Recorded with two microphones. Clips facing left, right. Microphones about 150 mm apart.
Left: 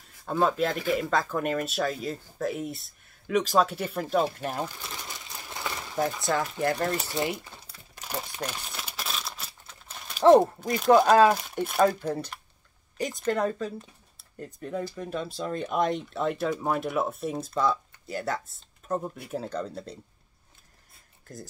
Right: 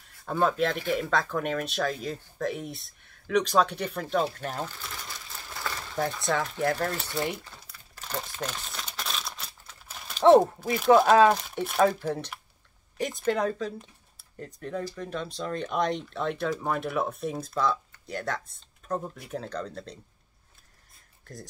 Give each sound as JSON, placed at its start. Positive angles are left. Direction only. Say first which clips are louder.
{"t": 0.3, "sound": "speech", "louder": "even", "side_deg": 0}
{"t": 5.9, "sound": "speech", "louder": "left 1 dB", "side_deg": 0}
{"t": 6.9, "sound": "speech", "louder": "left 2 dB", "side_deg": 15}
{"t": 7.2, "sound": "speech", "louder": "left 1 dB", "side_deg": 5}
{"t": 7.5, "sound": "typing", "louder": "left 2 dB", "side_deg": 20}
{"t": 8.0, "sound": "a sound", "louder": "even", "side_deg": 10}
{"t": 10.1, "sound": "speech", "louder": "even", "side_deg": 0}